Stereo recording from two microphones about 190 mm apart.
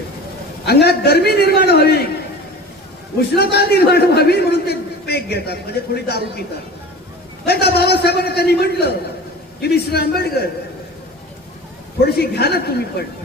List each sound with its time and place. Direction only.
0.6 s a man's voice: 60° left (ahead or behind)
3.2 s a man's voice: 55° left (ahead or behind)
7.4 s a sound: 55° left (ahead or behind)
9.6 s a man's voice: 55° left (ahead or behind)
12.0 s a man's voice: 55° left (ahead or behind)